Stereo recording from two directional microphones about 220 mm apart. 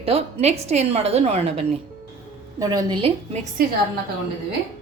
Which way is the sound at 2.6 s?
15° right (ahead or behind).